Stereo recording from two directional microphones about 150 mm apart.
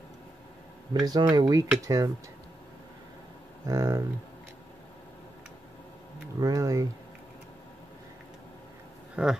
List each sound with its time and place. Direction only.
0.9 s speech: 25° right (ahead or behind)
3.6 s speech: 20° right (ahead or behind)
6.4 s speech: 20° right (ahead or behind)
9.1 s speech: 5° right (ahead or behind)